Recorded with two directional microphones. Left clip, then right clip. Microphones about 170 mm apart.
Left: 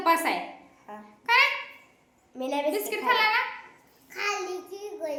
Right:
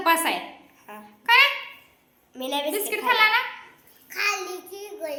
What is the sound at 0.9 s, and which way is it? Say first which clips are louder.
Babbling: right 1 dB; 25° left (ahead or behind).